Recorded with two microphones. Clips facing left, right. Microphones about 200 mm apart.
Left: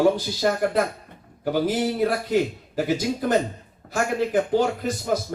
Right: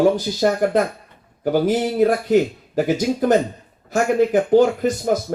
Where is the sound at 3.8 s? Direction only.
55° left (ahead or behind).